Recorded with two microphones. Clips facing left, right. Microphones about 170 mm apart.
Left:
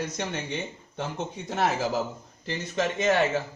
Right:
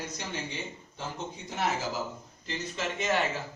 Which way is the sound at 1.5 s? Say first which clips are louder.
Left 5 dB; 65° left (ahead or behind).